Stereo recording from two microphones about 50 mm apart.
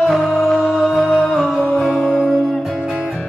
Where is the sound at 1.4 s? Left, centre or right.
Centre.